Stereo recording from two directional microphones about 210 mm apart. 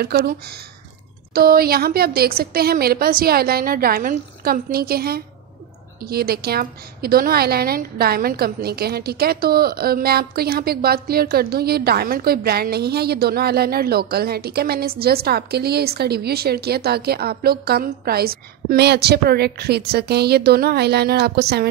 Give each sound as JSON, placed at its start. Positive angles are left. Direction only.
{"t": 0.0, "sound": "a woman's voice", "side_deg": -50}